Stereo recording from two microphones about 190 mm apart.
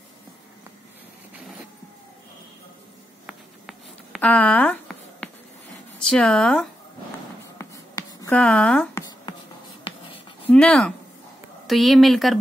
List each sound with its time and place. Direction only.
3.3 s a sound: centre (ahead or behind)
5.9 s speech: 5° left (ahead or behind)
7.5 s writing: 20° left (ahead or behind)
8.3 s speech: 5° left (ahead or behind)
9.8 s writing: 30° left (ahead or behind)
10.5 s speech: 5° left (ahead or behind)